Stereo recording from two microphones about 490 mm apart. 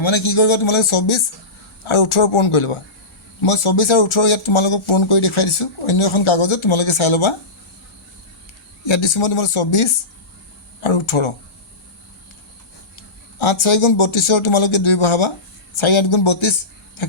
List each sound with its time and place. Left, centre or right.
0.0 s speech: left
8.8 s speech: left
13.4 s speech: left